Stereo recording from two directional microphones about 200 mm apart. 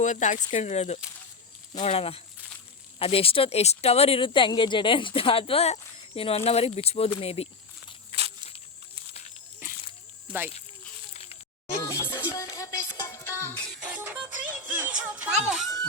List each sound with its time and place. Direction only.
0.0 s speech: 35° left (ahead or behind)
8.1 s walk: 30° right (ahead or behind)
10.3 s speech: 25° right (ahead or behind)
11.1 s a sound: 30° left (ahead or behind)
11.9 s music: 15° left (ahead or behind)
13.8 s music: 10° right (ahead or behind)